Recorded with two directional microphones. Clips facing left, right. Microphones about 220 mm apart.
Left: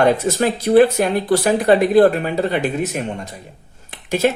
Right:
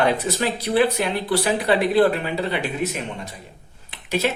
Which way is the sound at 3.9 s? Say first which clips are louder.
Left 5 dB; 45° left (ahead or behind).